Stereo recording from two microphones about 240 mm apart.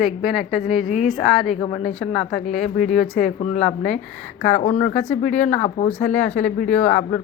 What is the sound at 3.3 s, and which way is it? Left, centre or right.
Speech, left.